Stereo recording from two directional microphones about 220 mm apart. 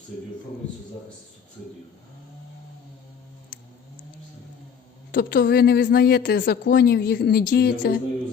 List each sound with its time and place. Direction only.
5.1 s a woman's voice: 50° left (ahead or behind)